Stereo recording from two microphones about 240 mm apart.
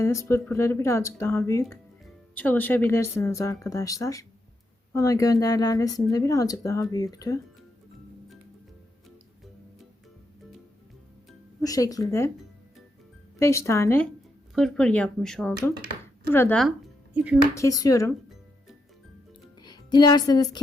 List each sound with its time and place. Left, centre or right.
0.0 s speech: centre
11.6 s speech: centre
13.4 s speech: centre
17.5 s speech: centre
19.6 s a woman's voice: centre